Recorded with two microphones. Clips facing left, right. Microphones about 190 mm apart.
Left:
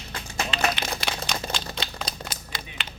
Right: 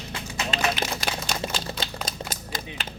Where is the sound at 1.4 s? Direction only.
30° right (ahead or behind).